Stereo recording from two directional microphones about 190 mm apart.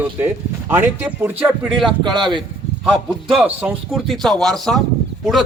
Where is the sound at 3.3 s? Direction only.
5° right (ahead or behind).